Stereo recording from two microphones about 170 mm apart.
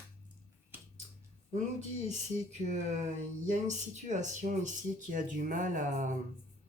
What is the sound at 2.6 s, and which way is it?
Speech, 45° right (ahead or behind).